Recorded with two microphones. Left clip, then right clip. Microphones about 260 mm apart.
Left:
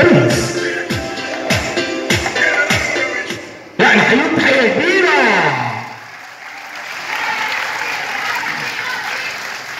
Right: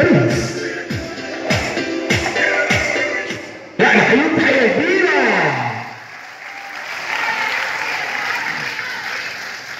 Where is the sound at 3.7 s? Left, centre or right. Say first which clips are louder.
Left 2 dB; left.